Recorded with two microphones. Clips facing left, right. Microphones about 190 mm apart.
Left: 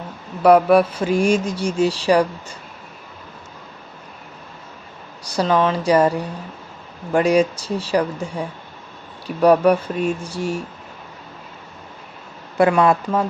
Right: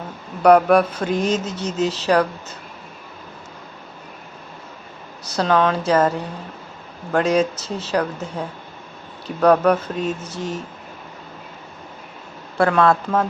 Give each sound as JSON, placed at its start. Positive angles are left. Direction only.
{"t": 0.4, "sound": "speech", "side_deg": 5}
{"t": 5.2, "sound": "speech", "side_deg": 10}
{"t": 12.5, "sound": "speech", "side_deg": 15}